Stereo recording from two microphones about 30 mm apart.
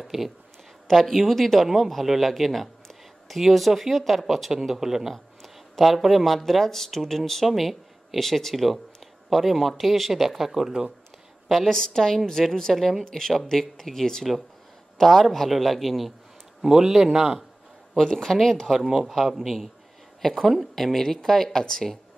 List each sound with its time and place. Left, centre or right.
0.1 s speech: centre
4.5 s a man's voice: centre
5.1 s a man's voice: centre
11.4 s a woman's voice: centre
11.7 s a man's voice: centre
16.6 s a man's voice: centre
17.9 s speech: centre
18.9 s speech: centre